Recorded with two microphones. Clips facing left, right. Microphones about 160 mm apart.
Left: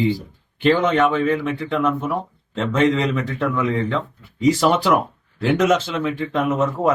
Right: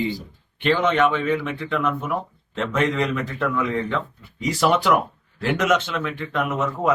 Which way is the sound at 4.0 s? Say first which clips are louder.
Left 5 dB; 30° left (ahead or behind).